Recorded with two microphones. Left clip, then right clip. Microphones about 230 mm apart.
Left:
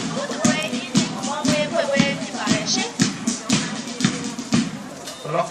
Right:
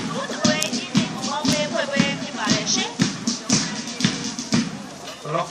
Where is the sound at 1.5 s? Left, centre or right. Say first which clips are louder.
Left 3 dB; left.